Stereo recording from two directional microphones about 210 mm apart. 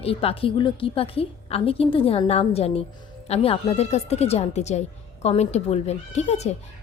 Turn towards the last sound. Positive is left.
turn(degrees=30)  # may be behind; listen again after turning